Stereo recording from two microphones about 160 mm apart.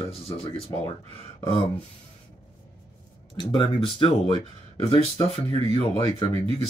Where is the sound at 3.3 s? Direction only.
30° left (ahead or behind).